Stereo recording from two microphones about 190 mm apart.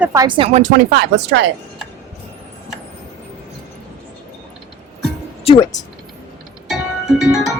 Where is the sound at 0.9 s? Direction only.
65° right (ahead or behind).